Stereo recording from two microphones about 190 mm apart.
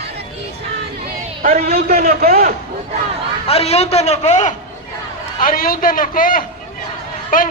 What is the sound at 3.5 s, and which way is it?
A man's voice, 30° left (ahead or behind).